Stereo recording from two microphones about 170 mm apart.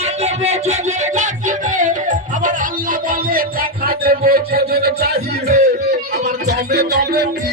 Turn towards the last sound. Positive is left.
turn(degrees=-70)  # may be behind; listen again after turning